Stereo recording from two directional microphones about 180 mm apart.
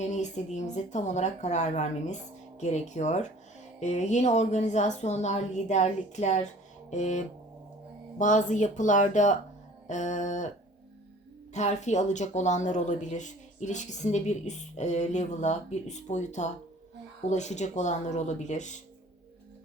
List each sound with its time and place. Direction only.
0.1 s a woman's voice: 40° left (ahead or behind)
11.5 s a woman's voice: 40° left (ahead or behind)